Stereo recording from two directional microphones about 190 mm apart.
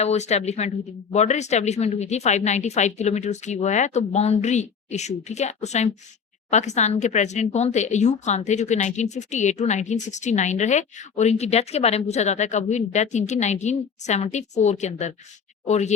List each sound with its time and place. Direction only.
0.0 s speech: 35° left (ahead or behind)